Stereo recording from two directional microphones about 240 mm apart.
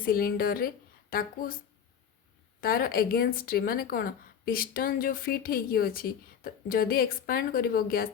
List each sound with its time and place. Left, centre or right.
0.0 s speech: left
2.6 s speech: left